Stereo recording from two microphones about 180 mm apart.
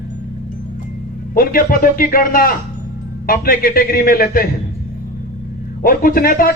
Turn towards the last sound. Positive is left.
turn(degrees=50)  # may be behind; listen again after turning